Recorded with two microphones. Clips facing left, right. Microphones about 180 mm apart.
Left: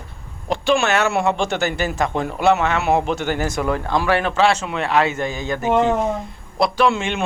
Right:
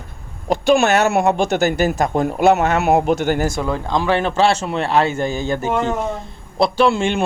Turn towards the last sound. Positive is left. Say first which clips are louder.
# right 3 dB
turn(degrees=-35)  # may be behind; listen again after turning